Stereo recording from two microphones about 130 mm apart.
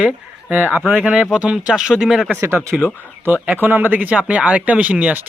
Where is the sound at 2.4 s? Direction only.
20° right (ahead or behind).